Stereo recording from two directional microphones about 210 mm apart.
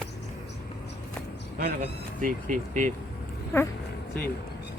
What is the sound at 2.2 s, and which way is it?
Speech, 40° right (ahead or behind).